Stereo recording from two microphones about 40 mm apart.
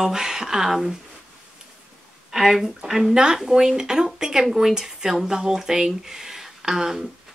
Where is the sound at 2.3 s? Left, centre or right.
Centre.